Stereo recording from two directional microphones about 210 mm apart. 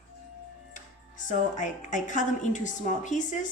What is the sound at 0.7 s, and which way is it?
Speech, 35° left (ahead or behind).